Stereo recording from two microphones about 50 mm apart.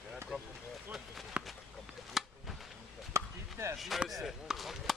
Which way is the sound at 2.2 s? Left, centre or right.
Centre.